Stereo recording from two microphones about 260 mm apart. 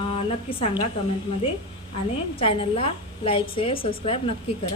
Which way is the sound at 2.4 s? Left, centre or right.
Left.